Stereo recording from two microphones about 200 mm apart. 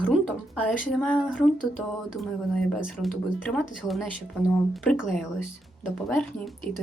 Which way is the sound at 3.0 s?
Centre (ahead or behind).